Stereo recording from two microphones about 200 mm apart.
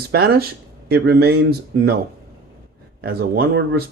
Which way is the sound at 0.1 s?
50° right (ahead or behind).